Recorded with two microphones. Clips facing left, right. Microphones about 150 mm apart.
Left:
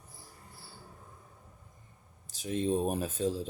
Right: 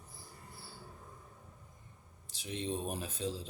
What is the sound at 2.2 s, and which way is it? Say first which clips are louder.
Speech: left 8 dB; 45° left (ahead or behind).